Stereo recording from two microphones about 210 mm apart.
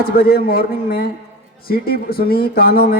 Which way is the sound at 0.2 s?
45° left (ahead or behind).